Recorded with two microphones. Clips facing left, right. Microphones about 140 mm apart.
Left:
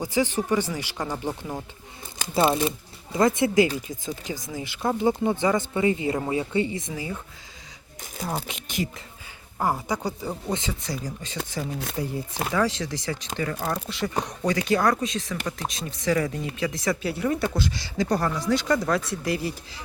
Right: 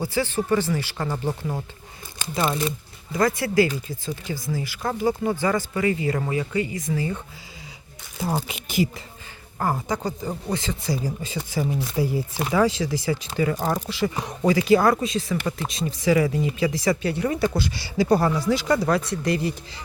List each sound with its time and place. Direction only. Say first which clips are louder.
0.0 s speech: even; 15° left (ahead or behind)
2.3 s speech: left 3 dB; 25° left (ahead or behind)
6.9 s speech: right 6 dB; 10° left (ahead or behind)
8.2 s speech: right 4 dB; 5° right (ahead or behind)
9.6 s speech: right 1 dB; 10° left (ahead or behind)
10.8 s speech: right 5 dB; 5° right (ahead or behind)